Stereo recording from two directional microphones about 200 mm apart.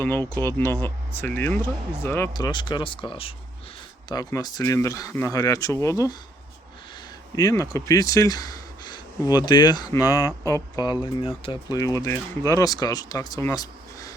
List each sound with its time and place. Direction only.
0.0 s speech: 10° left (ahead or behind)
7.3 s speech: 15° left (ahead or behind)